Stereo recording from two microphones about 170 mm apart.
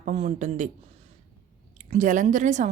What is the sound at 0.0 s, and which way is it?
Speech, 40° right (ahead or behind).